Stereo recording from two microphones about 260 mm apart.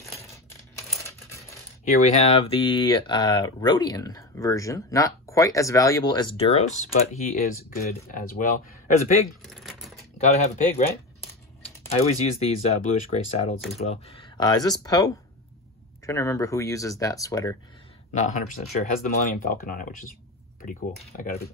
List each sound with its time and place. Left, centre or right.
1.9 s speech: left
9.4 s a sound: centre
10.1 s speech: left
11.9 s speech: left
18.1 s speech: left